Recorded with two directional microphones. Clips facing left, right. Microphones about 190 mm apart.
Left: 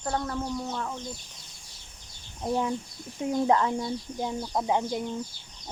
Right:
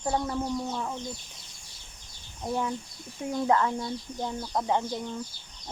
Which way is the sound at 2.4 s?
20° left (ahead or behind).